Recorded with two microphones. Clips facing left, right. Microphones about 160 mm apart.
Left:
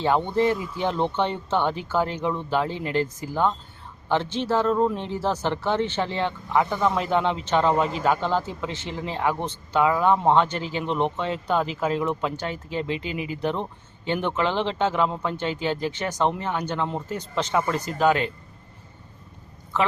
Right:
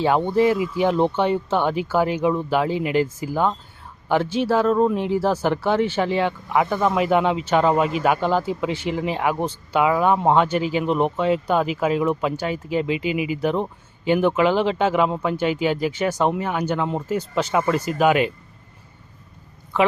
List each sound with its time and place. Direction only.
0.0 s speech: 10° right (ahead or behind)